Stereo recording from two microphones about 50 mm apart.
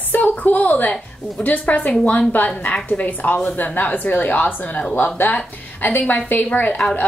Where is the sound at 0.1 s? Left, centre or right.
Left.